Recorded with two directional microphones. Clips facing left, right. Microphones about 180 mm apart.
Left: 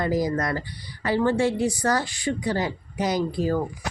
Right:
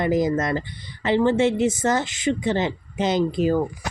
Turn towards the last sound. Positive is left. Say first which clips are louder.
# right 4 dB
turn(degrees=-20)  # may be behind; listen again after turning